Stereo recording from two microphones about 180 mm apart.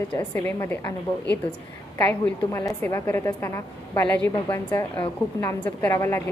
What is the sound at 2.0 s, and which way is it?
A woman's voice, 15° left (ahead or behind).